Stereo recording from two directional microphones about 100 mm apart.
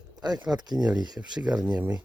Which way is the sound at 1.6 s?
45° right (ahead or behind).